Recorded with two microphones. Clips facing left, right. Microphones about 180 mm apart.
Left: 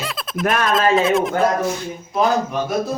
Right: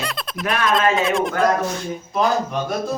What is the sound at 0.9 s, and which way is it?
Speech, centre (ahead or behind).